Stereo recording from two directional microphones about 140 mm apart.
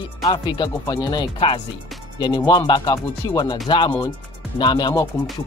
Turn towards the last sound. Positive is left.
turn(degrees=35)  # may be behind; listen again after turning